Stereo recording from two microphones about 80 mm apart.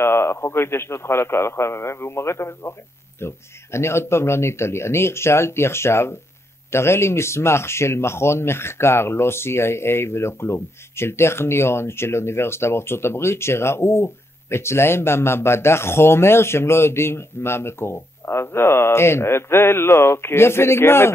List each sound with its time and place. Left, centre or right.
0.0 s speech: left